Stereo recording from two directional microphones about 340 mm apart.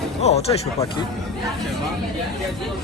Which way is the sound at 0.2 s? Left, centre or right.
Centre.